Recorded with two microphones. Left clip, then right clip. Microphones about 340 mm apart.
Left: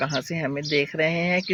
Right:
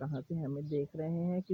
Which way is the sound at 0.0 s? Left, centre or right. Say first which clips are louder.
Left 16 dB; right.